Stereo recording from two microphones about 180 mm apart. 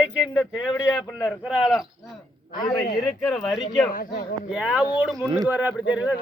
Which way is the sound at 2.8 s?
60° left (ahead or behind).